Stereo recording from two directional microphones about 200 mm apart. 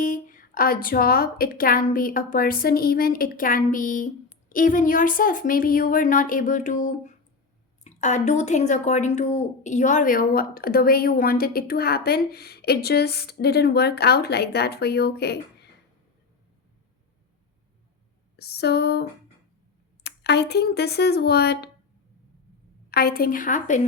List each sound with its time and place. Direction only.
0.0 s a woman's voice: 40° left (ahead or behind)
18.3 s speech: 55° left (ahead or behind)
20.1 s speech: 55° left (ahead or behind)
22.9 s a woman's voice: 50° left (ahead or behind)